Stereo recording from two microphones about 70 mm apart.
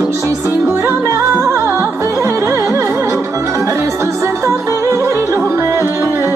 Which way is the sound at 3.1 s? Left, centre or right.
Right.